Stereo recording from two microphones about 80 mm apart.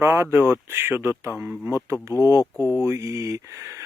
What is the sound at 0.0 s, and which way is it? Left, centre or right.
Speech, right.